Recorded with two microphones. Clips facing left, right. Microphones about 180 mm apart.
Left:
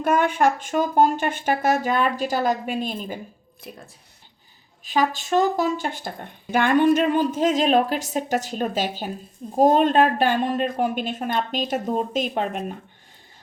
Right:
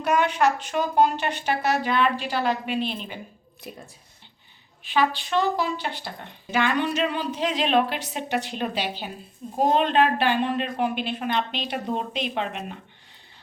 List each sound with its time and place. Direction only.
0.0 s speech: 50° left (ahead or behind)
4.8 s speech: 40° left (ahead or behind)